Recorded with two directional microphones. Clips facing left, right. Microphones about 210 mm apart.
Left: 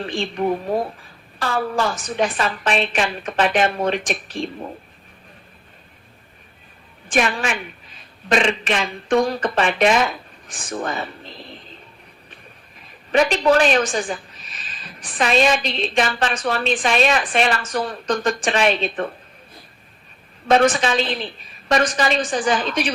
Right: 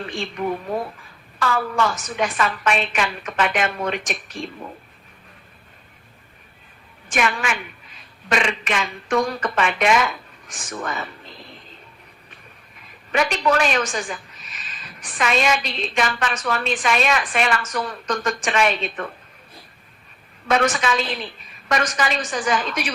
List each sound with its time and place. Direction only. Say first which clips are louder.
0.0 s a woman's voice: left 4 dB; 30° left (ahead or behind)
7.1 s a woman's voice: left 2 dB; 35° left (ahead or behind)
13.1 s a woman's voice: left 4 dB; 30° left (ahead or behind)
20.5 s a woman's voice: left 4 dB; 30° left (ahead or behind)